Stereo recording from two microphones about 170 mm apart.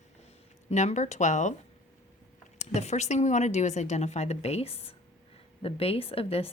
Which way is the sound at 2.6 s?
40° left (ahead or behind).